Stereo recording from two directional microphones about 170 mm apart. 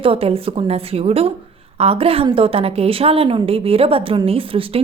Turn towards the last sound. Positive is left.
turn(degrees=-30)  # may be behind; listen again after turning